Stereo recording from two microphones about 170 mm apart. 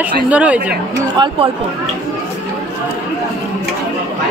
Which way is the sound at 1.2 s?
25° right (ahead or behind).